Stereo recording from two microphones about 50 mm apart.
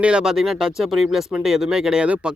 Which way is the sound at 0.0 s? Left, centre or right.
Centre.